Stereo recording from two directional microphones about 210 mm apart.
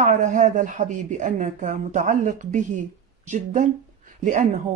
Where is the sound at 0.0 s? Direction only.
35° right (ahead or behind).